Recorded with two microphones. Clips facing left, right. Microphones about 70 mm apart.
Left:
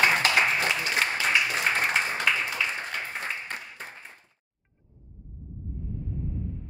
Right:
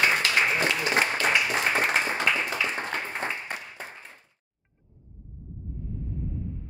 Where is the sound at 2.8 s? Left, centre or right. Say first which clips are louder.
Right 3 dB; right.